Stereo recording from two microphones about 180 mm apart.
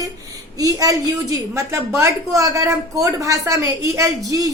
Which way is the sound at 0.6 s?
20° right (ahead or behind).